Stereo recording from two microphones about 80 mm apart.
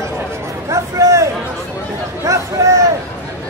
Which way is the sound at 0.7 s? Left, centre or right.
Right.